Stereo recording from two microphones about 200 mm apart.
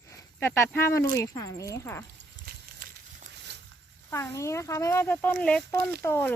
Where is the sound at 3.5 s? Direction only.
60° right (ahead or behind).